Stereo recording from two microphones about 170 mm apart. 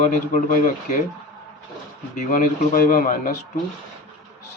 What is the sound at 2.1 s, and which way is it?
Speech, 55° left (ahead or behind).